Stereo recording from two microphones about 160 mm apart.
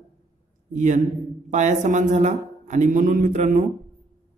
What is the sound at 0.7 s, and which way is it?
Speech, 50° right (ahead or behind).